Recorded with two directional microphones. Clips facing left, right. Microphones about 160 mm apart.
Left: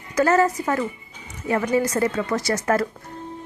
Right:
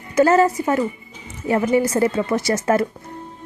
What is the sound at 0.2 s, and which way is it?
Speech, 25° right (ahead or behind).